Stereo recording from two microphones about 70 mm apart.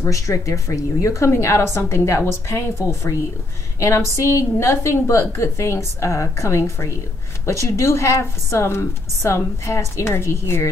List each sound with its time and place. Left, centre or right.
0.0 s a woman's voice: left